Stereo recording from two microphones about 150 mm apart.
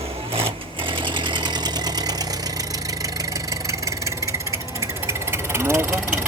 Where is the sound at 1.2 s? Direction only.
30° right (ahead or behind).